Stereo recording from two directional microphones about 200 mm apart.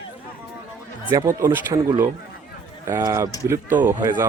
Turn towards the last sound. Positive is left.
turn(degrees=-15)  # may be behind; listen again after turning